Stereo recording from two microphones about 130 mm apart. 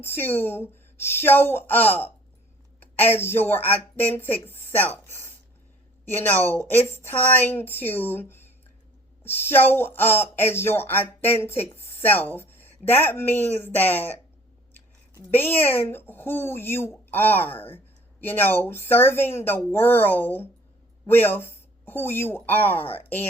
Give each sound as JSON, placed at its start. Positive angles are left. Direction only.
{"t": 0.0, "sound": "speech", "side_deg": 15}
{"t": 15.1, "sound": "speech", "side_deg": 15}